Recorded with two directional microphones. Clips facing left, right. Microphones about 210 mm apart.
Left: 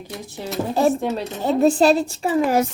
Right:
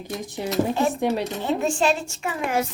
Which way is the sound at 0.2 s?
15° right (ahead or behind).